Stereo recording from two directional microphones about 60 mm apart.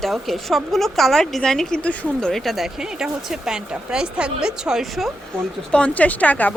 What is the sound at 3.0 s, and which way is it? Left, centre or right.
Speech, centre.